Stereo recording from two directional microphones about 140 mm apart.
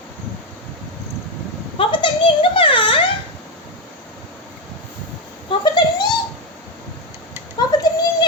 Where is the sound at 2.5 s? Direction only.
35° left (ahead or behind).